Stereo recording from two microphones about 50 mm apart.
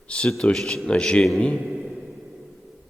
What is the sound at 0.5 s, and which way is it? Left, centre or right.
Speech, centre.